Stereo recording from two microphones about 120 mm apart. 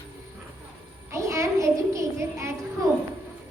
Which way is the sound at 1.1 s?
25° right (ahead or behind).